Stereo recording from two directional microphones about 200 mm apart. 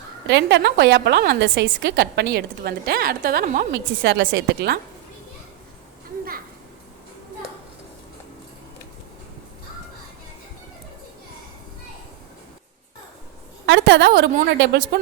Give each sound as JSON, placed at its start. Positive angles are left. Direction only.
{"t": 0.3, "sound": "a woman's voice", "side_deg": -60}
{"t": 13.7, "sound": "a woman's voice", "side_deg": -60}